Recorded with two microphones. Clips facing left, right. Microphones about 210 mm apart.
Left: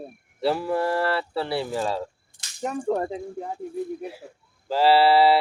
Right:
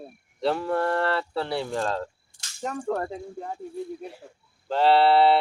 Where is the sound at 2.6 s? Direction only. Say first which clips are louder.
Left 3 dB; 15° left (ahead or behind).